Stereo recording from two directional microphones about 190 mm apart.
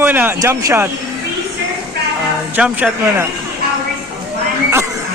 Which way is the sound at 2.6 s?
5° right (ahead or behind).